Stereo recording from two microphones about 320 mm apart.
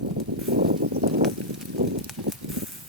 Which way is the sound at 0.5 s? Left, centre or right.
Right.